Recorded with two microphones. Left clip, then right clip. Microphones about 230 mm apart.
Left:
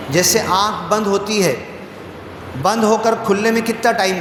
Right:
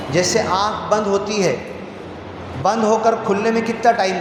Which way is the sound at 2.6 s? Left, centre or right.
Left.